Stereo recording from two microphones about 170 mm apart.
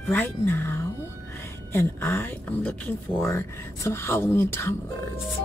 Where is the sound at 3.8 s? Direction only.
15° left (ahead or behind).